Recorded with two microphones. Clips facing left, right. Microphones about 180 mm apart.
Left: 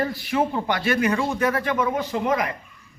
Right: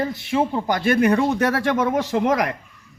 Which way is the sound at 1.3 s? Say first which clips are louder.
Right 3 dB; 75° right (ahead or behind).